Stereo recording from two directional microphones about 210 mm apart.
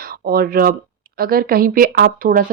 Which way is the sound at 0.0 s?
45° right (ahead or behind).